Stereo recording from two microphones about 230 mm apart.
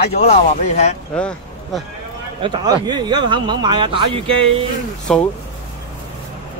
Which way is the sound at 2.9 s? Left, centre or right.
Centre.